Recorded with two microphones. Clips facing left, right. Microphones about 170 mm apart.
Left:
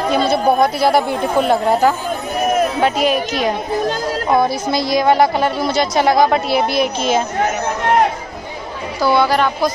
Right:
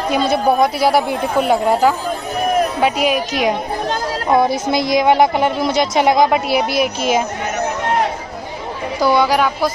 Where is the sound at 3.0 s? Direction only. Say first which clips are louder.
Even; 10° right (ahead or behind).